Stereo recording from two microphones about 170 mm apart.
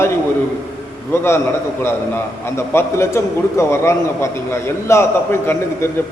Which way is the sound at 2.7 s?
15° left (ahead or behind).